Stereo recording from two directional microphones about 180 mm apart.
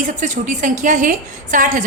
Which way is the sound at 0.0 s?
45° right (ahead or behind).